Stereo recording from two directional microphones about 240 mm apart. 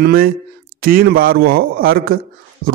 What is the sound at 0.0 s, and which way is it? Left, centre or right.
Speech, right.